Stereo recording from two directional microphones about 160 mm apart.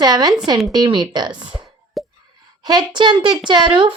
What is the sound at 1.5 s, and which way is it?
Plop, centre (ahead or behind).